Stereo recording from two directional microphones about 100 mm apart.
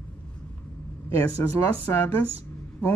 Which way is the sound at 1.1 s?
25° left (ahead or behind).